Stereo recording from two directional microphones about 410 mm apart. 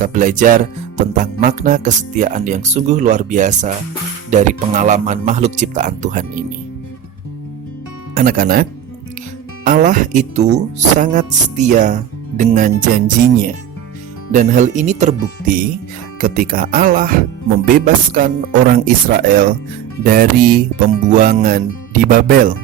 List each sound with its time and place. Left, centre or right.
0.0 s speech: centre
8.1 s speech: right
9.6 s speech: centre